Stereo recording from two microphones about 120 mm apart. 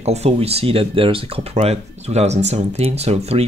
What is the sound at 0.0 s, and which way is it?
Speech, 65° right (ahead or behind).